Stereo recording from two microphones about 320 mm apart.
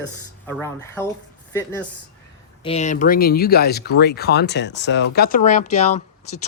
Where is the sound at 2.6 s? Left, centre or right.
Left.